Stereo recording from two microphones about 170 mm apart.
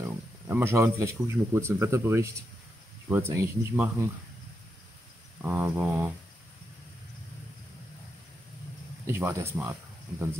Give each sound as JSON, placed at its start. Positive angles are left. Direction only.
{"t": 0.0, "sound": "speech", "side_deg": -10}
{"t": 5.4, "sound": "speech", "side_deg": -10}
{"t": 9.0, "sound": "speech", "side_deg": -15}